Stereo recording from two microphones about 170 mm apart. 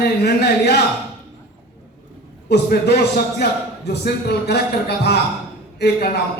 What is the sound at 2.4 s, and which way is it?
A man's voice, 70° left (ahead or behind).